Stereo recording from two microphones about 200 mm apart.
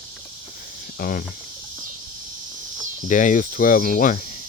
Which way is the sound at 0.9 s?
45° left (ahead or behind).